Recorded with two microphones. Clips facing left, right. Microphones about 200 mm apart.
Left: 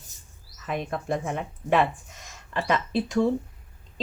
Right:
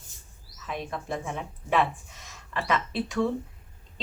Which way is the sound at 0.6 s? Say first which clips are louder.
Left 4 dB; 55° left (ahead or behind).